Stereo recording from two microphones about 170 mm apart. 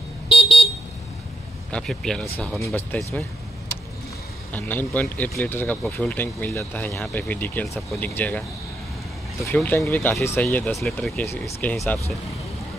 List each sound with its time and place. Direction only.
0.3 s vehicle: 30° left (ahead or behind)
1.7 s speech: 5° left (ahead or behind)
4.5 s speech: 10° left (ahead or behind)
9.5 s speech: 10° left (ahead or behind)